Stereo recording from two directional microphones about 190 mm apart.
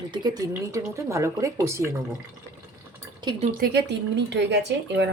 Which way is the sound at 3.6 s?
60° right (ahead or behind).